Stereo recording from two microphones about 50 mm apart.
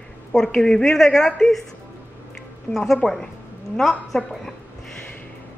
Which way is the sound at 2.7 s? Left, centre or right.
Left.